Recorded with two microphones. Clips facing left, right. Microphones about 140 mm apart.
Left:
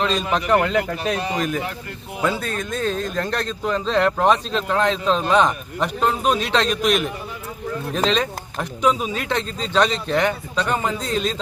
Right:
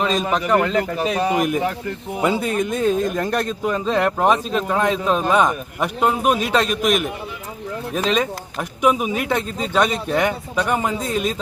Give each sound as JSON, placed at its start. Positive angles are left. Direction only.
{"t": 0.3, "sound": "speech", "side_deg": 0}
{"t": 1.4, "sound": "a man's voice", "side_deg": -20}